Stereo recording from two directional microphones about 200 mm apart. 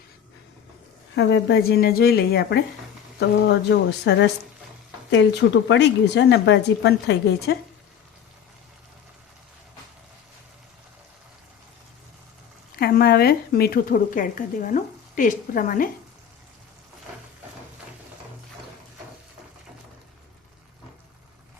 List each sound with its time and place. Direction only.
1.1 s speech: 60° left (ahead or behind)
12.8 s speech: 50° left (ahead or behind)